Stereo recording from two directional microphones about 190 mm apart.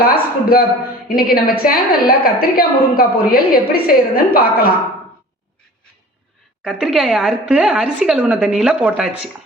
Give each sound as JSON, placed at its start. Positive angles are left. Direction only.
{"t": 0.0, "sound": "a woman's voice", "side_deg": 50}
{"t": 6.7, "sound": "a woman's voice", "side_deg": -5}